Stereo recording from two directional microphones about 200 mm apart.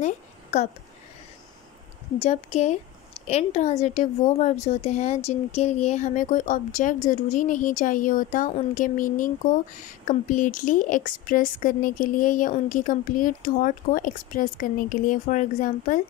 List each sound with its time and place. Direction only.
0.0 s a woman's voice: 35° left (ahead or behind)
2.1 s a woman's voice: 30° left (ahead or behind)